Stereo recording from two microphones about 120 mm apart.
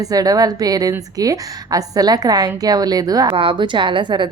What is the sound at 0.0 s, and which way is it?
A woman's voice, 30° right (ahead or behind).